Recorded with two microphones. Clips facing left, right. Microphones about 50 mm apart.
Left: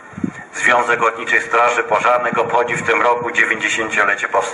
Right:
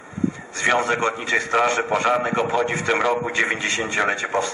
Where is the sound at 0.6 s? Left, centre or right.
Centre.